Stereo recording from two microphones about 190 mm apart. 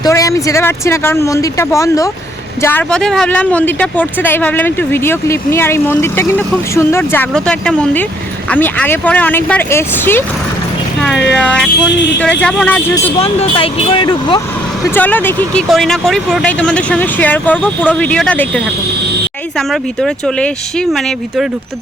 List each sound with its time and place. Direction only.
0.0 s speech: 15° left (ahead or behind)
13.1 s speech: 30° left (ahead or behind)
14.8 s speech: 10° left (ahead or behind)